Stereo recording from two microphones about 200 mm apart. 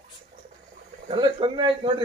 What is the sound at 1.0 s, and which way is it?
Speech, 25° right (ahead or behind).